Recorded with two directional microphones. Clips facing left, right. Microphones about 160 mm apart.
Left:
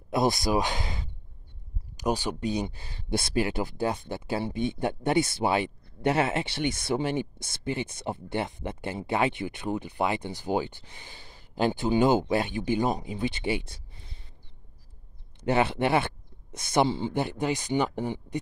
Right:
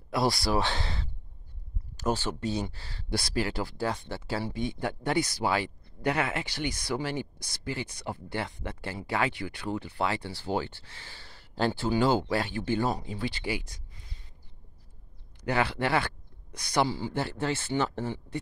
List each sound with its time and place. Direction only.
0.1 s speech: 20° left (ahead or behind)
15.4 s speech: 20° left (ahead or behind)